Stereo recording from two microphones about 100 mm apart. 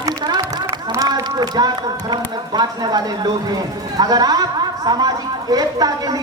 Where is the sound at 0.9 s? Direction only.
40° right (ahead or behind).